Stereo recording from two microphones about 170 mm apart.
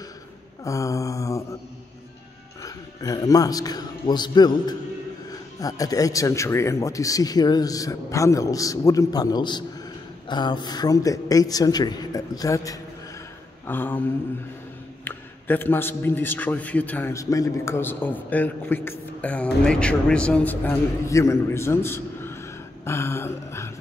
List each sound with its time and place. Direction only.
0.7 s speech: 20° left (ahead or behind)
2.6 s a man's voice: 20° left (ahead or behind)
15.0 s a man's voice: 10° left (ahead or behind)